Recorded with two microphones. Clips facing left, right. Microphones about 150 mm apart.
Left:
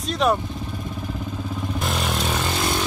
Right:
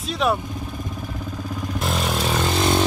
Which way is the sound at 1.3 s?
Centre (ahead or behind).